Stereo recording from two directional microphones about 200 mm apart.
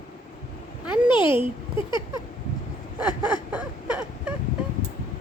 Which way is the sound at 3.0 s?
20° left (ahead or behind).